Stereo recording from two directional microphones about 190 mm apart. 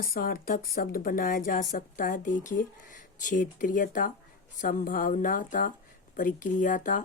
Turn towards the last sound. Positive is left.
turn(degrees=45)  # may be behind; listen again after turning